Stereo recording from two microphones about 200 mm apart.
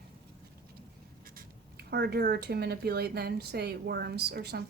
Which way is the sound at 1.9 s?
55° right (ahead or behind).